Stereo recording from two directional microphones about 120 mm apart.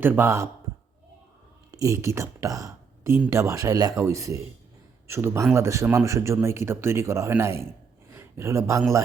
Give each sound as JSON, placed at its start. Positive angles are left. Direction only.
{"t": 0.0, "sound": "speech", "side_deg": -20}
{"t": 1.7, "sound": "speech", "side_deg": -25}
{"t": 8.1, "sound": "a sound", "side_deg": -20}